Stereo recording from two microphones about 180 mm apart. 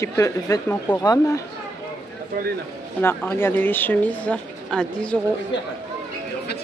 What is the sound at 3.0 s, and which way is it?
Speech, 10° left (ahead or behind).